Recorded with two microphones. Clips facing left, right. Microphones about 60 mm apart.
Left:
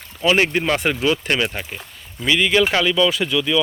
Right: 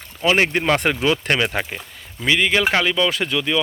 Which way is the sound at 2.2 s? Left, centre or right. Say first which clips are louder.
Left 1 dB; right.